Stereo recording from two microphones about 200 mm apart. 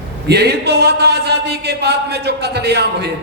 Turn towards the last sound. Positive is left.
turn(degrees=-55)  # may be behind; listen again after turning